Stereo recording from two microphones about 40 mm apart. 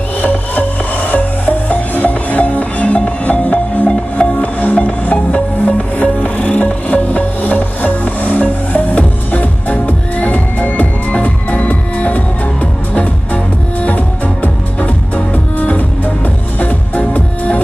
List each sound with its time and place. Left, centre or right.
0.2 s music: left